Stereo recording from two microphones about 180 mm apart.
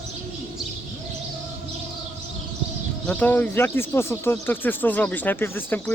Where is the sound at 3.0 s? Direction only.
10° left (ahead or behind).